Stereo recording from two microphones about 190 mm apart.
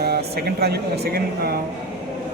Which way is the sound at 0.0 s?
55° right (ahead or behind).